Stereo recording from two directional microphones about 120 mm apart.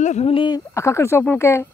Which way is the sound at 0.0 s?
70° left (ahead or behind).